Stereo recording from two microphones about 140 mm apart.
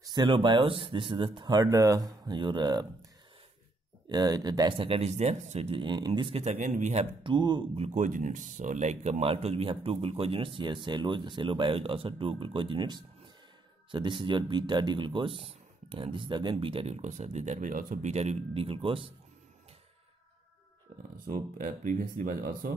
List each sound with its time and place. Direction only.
0.0 s speech: 30° right (ahead or behind)
4.1 s speech: 30° right (ahead or behind); by 7.1 s 55° right (ahead or behind)
7.2 s speech: 35° right (ahead or behind)
7.8 s speech: 60° right (ahead or behind); by 13.0 s 35° right (ahead or behind)
14.2 s speech: 35° right (ahead or behind); by 18.1 s 75° right (ahead or behind)
18.1 s speech: 50° right (ahead or behind)
21.5 s speech: 70° right (ahead or behind); by 22.7 s 90° right